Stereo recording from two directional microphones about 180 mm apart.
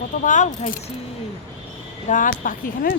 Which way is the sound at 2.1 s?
50° left (ahead or behind).